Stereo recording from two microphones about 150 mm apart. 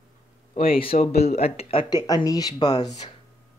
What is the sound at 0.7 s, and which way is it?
Speech, 40° left (ahead or behind).